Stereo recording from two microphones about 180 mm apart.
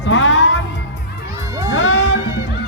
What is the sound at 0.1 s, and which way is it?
Music, 90° left.